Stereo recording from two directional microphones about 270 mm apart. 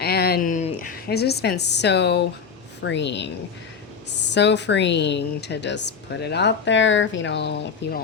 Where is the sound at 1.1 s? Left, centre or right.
Left.